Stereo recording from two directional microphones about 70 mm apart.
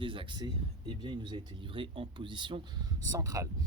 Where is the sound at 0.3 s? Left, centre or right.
Right.